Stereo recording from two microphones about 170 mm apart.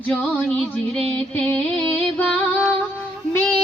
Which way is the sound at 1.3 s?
10° left (ahead or behind).